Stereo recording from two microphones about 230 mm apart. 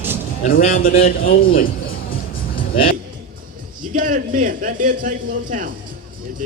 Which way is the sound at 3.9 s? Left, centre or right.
Right.